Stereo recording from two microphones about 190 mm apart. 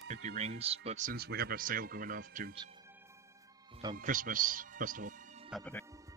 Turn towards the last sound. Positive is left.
turn(degrees=0)  # may be behind; listen again after turning